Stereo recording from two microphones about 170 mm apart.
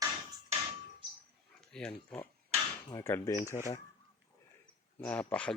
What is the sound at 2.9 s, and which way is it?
Speech, 15° left (ahead or behind).